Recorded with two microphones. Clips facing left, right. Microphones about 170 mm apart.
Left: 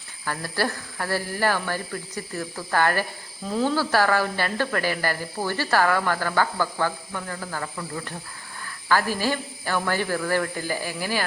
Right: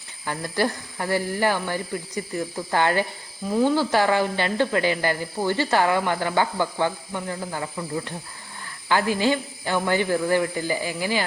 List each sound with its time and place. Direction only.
0.3 s a woman's voice: 20° right (ahead or behind)